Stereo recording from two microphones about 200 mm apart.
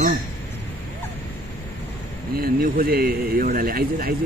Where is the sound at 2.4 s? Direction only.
45° right (ahead or behind).